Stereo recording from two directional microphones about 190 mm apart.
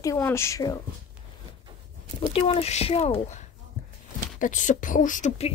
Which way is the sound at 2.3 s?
30° left (ahead or behind).